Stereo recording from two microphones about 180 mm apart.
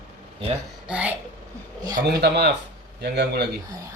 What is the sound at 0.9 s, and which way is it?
Speech, 5° right (ahead or behind).